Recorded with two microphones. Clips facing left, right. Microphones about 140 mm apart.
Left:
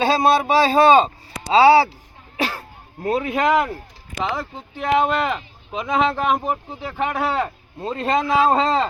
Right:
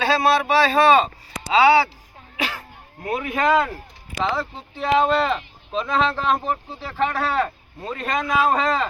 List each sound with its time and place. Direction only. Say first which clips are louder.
0.0 s speech: left 2 dB; 25° left (ahead or behind)
2.4 s cough: left 3 dB; 35° left (ahead or behind); by 3.8 s 15° left (ahead or behind)
4.2 s speech: right 1 dB; 15° left (ahead or behind)